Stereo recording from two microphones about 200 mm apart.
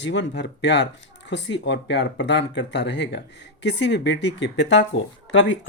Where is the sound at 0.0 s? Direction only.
60° left (ahead or behind).